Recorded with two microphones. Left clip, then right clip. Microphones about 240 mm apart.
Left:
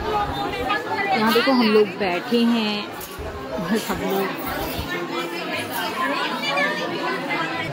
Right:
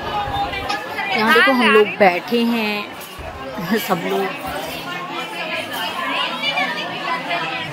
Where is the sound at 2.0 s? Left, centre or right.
Centre.